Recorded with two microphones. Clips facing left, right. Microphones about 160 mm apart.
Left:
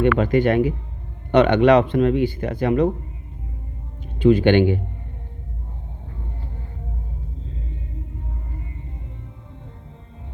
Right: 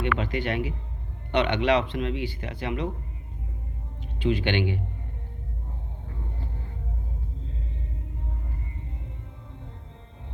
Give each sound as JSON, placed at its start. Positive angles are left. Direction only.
{"t": 0.0, "sound": "speech", "side_deg": 50}
{"t": 4.0, "sound": "speech", "side_deg": 45}